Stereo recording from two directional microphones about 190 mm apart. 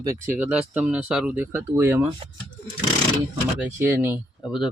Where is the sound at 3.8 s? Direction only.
10° right (ahead or behind).